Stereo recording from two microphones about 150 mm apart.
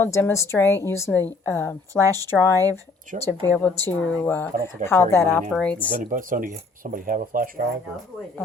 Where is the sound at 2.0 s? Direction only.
25° right (ahead or behind).